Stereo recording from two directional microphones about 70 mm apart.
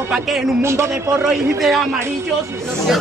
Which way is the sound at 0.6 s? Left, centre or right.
Right.